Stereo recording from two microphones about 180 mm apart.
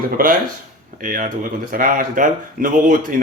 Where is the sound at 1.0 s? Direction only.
50° right (ahead or behind).